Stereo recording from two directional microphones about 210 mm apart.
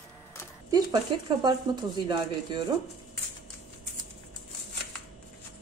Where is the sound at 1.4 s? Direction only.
20° right (ahead or behind).